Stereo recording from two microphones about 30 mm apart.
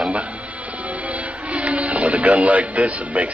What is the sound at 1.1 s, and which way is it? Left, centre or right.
Speech, right.